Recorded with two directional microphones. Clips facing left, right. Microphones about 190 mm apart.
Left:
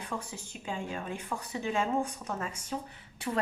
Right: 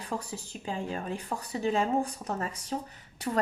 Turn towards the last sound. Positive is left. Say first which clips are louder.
# right 2 dB
turn(degrees=-40)  # may be behind; listen again after turning